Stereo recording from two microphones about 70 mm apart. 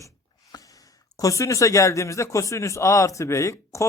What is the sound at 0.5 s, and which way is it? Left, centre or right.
Gasp, left.